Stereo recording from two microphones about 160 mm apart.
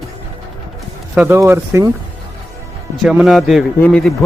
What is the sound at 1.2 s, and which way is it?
Speech, 15° right (ahead or behind).